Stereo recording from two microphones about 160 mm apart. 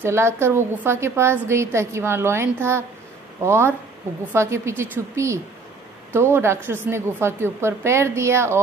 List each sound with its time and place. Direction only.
0.0 s a woman's voice: 15° right (ahead or behind)